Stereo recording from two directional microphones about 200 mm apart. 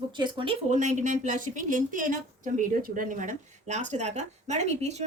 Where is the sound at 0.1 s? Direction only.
25° right (ahead or behind).